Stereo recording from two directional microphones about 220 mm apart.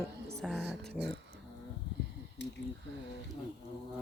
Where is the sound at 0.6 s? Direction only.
50° right (ahead or behind).